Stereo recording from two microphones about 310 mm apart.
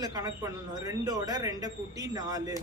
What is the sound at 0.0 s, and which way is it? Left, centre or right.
Speech, centre.